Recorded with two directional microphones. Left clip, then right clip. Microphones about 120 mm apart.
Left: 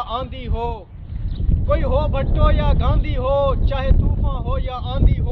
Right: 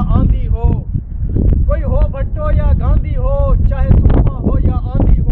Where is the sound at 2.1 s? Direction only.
15° left (ahead or behind).